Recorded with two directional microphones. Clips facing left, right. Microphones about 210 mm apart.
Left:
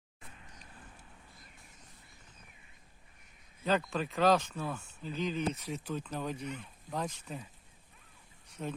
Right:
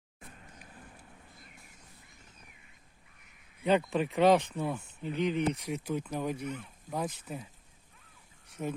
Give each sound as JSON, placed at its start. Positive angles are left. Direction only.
{"t": 3.6, "sound": "speech", "side_deg": -15}
{"t": 8.6, "sound": "speech", "side_deg": -10}